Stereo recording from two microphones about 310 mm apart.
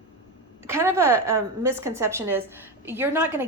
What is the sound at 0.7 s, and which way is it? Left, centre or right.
A woman's voice, centre.